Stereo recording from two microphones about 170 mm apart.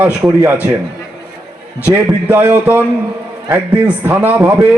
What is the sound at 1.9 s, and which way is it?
Speech, 15° right (ahead or behind).